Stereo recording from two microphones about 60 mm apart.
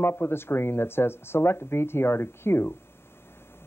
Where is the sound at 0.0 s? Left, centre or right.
Left.